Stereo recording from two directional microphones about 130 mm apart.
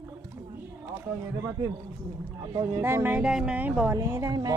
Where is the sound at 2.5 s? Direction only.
35° right (ahead or behind).